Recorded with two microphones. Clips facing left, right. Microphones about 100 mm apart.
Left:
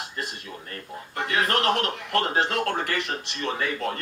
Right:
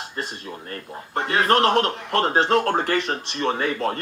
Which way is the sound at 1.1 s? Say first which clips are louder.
Right 5 dB; 35° right (ahead or behind).